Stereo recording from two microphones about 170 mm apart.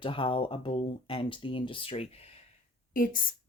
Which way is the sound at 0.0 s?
30° left (ahead or behind).